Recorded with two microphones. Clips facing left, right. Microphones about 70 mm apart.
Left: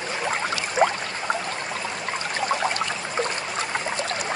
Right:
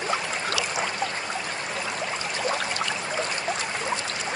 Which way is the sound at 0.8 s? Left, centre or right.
Left.